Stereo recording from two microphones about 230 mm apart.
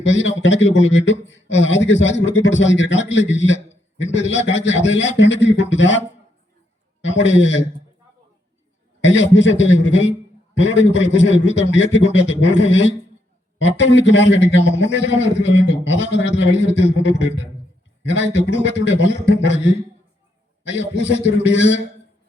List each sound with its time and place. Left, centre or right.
0.0 s a man's voice: left
7.0 s a man's voice: left
9.0 s a man's voice: left